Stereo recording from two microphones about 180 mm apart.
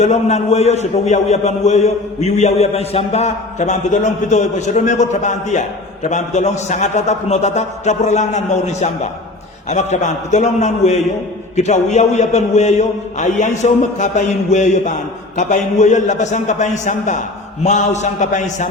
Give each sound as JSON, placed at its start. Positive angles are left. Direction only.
{"t": 0.0, "sound": "a man's voice", "side_deg": 40}